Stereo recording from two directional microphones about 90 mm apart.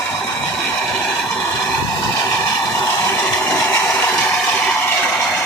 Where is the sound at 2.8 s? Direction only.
20° left (ahead or behind).